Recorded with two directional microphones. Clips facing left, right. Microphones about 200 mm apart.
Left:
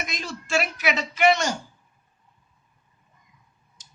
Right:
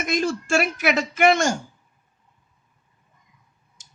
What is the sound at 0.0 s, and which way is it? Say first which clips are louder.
Speech: right 11 dB; 50° right (ahead or behind).